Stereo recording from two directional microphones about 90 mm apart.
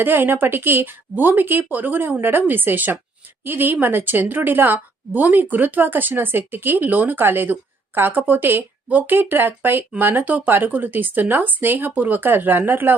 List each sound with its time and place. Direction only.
0.0 s a woman's voice: 25° right (ahead or behind)